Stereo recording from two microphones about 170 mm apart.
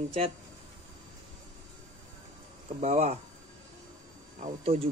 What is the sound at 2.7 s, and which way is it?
Speech, 40° right (ahead or behind).